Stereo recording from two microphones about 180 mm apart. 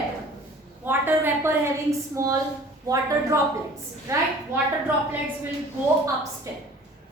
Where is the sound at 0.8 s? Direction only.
10° right (ahead or behind).